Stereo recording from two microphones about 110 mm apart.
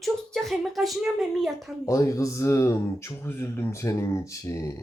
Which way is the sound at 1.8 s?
30° left (ahead or behind).